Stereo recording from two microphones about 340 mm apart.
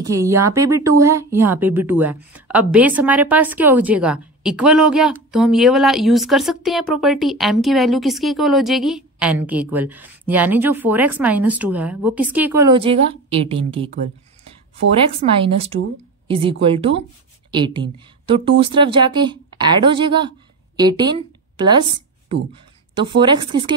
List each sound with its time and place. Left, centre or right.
0.0 s speech: centre
15.1 s a woman's voice: centre